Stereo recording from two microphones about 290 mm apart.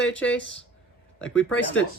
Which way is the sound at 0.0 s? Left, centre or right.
Left.